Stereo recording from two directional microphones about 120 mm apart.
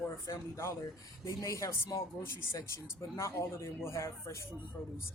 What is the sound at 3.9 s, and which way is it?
Speech, 25° left (ahead or behind).